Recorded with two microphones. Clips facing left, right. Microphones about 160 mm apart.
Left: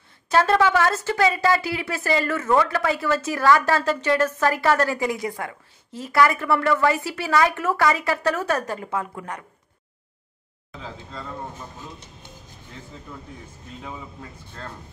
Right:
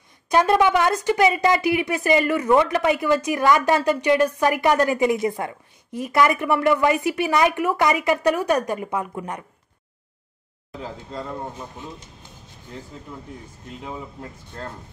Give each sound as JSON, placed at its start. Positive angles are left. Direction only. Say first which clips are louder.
{"t": 0.3, "sound": "speech", "louder": "right 1 dB", "side_deg": -15}